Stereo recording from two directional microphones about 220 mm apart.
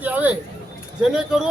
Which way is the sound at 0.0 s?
5° right (ahead or behind).